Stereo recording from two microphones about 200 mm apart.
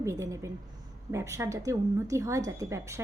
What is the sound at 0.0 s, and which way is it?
A woman's voice, 15° right (ahead or behind).